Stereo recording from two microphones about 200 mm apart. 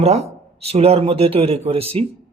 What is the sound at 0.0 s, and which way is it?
Speech, 30° right (ahead or behind).